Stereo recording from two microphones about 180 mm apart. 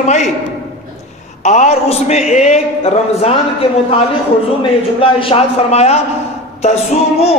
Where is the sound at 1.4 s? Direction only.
40° left (ahead or behind).